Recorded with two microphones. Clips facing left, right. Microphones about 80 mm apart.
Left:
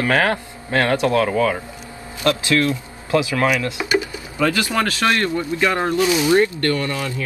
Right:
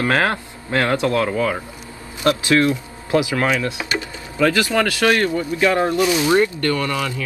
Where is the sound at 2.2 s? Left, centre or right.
Right.